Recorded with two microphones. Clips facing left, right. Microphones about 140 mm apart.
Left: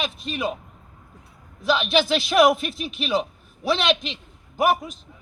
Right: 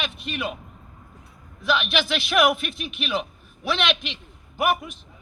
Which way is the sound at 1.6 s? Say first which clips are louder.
Left 3 dB; 35° left (ahead or behind).